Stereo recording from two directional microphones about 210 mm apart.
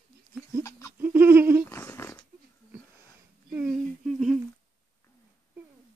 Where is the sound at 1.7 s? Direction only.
10° left (ahead or behind).